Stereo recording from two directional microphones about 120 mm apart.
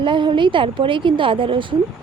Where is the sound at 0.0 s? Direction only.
40° right (ahead or behind).